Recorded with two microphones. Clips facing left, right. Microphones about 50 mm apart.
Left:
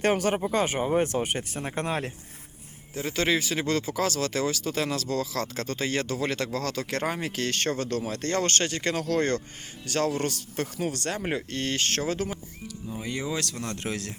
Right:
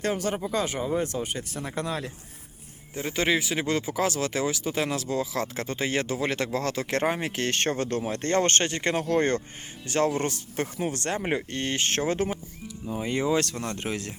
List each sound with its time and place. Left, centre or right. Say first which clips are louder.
0.0 s speech: left 3 dB; left
1.5 s speech: even; left
2.9 s speech: even; centre; by 11.2 s right
11.2 s speech: right 1 dB; centre